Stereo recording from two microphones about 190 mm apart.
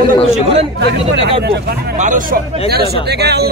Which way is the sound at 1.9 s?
40° right (ahead or behind).